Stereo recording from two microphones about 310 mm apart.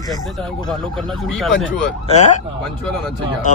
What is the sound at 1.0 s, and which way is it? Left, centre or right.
Speech, centre.